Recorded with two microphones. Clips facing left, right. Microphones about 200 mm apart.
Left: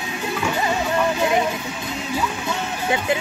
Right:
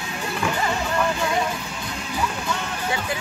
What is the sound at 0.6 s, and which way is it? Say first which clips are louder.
Music: left 4 dB; 20° left (ahead or behind).